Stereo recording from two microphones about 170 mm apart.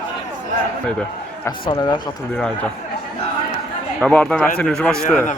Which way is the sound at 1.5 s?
25° left (ahead or behind).